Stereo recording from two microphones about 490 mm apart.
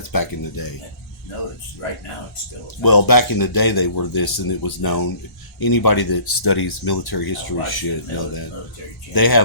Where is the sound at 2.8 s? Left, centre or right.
Left.